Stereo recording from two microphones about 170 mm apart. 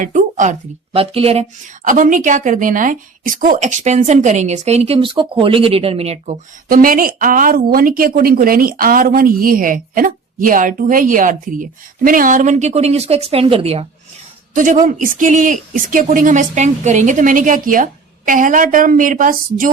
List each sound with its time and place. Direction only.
0.0 s speech: 50° right (ahead or behind)
0.9 s a woman's voice: 35° right (ahead or behind)
14.5 s a woman's voice: 50° right (ahead or behind)